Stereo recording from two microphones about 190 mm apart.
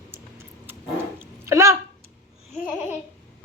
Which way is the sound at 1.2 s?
15° right (ahead or behind).